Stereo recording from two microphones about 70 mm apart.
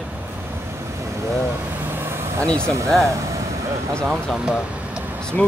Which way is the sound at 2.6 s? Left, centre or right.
Right.